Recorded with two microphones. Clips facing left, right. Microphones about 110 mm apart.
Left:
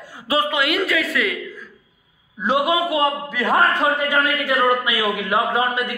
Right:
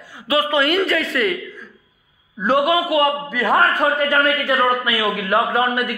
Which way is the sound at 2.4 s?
15° left (ahead or behind).